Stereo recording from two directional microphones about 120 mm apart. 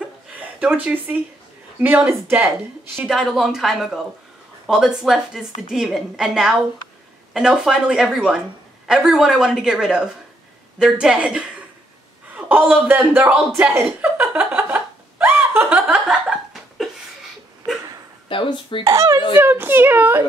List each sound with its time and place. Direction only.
0.6 s a woman's voice: 10° right (ahead or behind)
12.4 s chuckle: 15° right (ahead or behind)
18.3 s speech: 45° left (ahead or behind)
18.9 s a child's voice: 30° right (ahead or behind)